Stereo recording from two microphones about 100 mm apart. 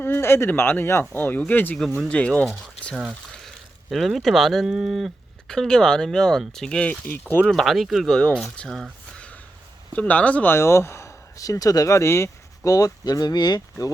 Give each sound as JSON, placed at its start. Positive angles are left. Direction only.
{"t": 0.0, "sound": "speech", "side_deg": 25}
{"t": 3.3, "sound": "speech", "side_deg": 0}
{"t": 7.5, "sound": "speech", "side_deg": 0}
{"t": 8.5, "sound": "a sound", "side_deg": 5}
{"t": 9.9, "sound": "speech", "side_deg": 15}